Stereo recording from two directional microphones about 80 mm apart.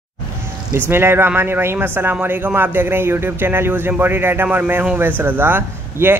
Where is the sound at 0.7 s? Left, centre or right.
Right.